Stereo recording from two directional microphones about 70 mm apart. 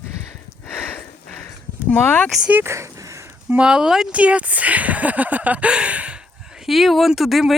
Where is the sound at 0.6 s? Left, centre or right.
Centre.